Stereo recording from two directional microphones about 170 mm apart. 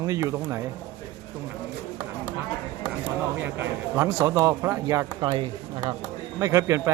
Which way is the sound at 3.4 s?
15° right (ahead or behind).